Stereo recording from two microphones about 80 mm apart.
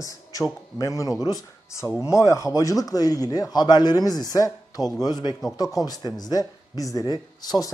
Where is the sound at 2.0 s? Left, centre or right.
Left.